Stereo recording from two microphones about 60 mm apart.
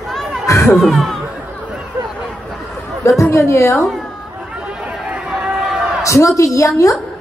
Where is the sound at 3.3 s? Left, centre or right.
Left.